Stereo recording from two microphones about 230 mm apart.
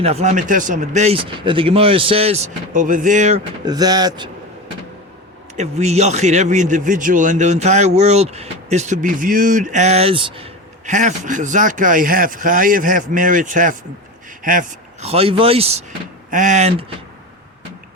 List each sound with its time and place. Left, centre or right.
0.0 s speech: right
3.6 s speech: centre
5.5 s a man's voice: right
15.0 s a man's voice: right